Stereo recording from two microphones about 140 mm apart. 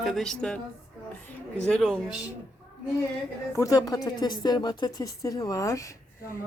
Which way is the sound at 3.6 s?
25° left (ahead or behind).